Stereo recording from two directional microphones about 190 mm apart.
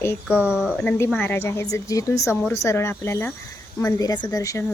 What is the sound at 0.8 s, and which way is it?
A woman's voice, 10° left (ahead or behind).